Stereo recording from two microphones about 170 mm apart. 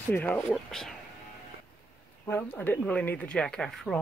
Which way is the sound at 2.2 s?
10° left (ahead or behind).